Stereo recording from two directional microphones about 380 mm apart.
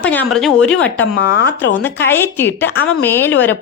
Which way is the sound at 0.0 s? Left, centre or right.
Centre.